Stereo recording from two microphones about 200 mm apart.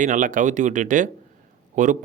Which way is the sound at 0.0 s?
40° right (ahead or behind).